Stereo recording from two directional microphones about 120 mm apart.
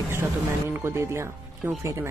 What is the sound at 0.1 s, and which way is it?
Speech, 20° right (ahead or behind).